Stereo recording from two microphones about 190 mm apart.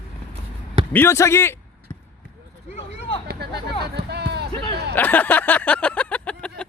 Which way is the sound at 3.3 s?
60° right (ahead or behind).